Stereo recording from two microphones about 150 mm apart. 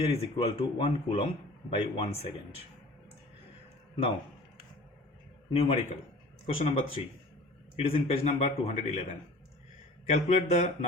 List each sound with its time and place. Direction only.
0.0 s speech: 40° left (ahead or behind)
5.5 s a man's voice: 40° left (ahead or behind)